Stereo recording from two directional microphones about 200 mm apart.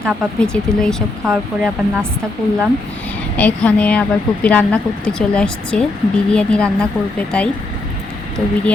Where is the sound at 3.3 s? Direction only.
5° left (ahead or behind).